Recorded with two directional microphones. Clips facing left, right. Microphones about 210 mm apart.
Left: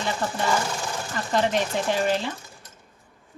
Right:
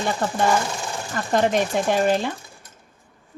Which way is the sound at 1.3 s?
50° right (ahead or behind).